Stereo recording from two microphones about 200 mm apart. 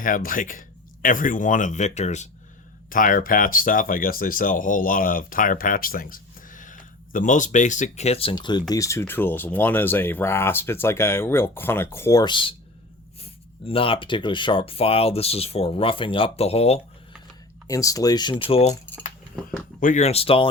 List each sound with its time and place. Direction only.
0.0 s speech: 45° left (ahead or behind)
17.7 s speech: 15° left (ahead or behind)
19.8 s speech: 35° left (ahead or behind)